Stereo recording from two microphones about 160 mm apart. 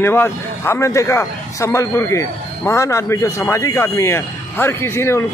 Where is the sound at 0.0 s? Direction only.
15° left (ahead or behind).